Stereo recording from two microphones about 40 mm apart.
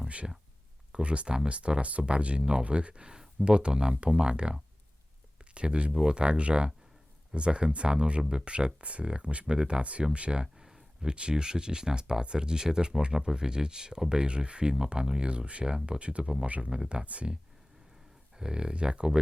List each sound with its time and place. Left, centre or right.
0.9 s speech: right
5.5 s speech: right
5.9 s speech: centre
6.1 s speech: right
10.4 s speech: centre
17.1 s speech: right
18.3 s speech: centre